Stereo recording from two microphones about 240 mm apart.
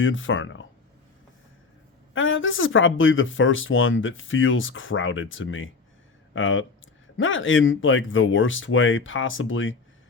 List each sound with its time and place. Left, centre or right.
0.0 s speech: left
2.1 s speech: left